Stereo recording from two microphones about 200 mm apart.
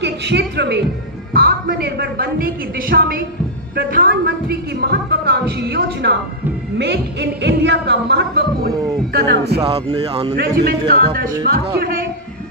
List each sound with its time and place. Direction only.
0.0 s a woman's voice: 60° right (ahead or behind)
6.7 s music: 60° right (ahead or behind)
9.1 s a woman's voice: 50° right (ahead or behind)
9.6 s speech: 30° right (ahead or behind)
10.3 s a woman's voice: 50° right (ahead or behind)